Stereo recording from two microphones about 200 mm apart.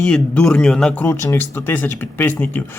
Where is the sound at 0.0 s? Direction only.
5° left (ahead or behind).